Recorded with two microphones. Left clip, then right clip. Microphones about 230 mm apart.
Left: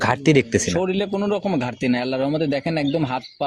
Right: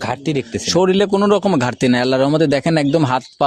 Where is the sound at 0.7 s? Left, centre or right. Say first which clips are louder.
Right 8 dB; right.